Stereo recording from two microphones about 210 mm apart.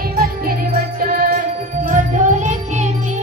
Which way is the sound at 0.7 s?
40° right (ahead or behind).